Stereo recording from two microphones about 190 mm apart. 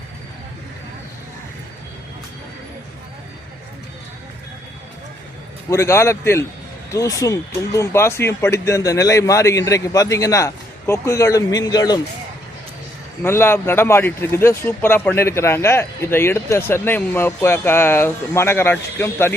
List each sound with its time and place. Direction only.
5.7 s speech: 15° left (ahead or behind)
13.2 s speech: 10° left (ahead or behind)